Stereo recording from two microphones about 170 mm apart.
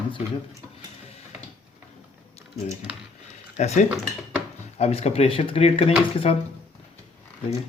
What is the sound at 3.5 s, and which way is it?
Speech, 45° left (ahead or behind).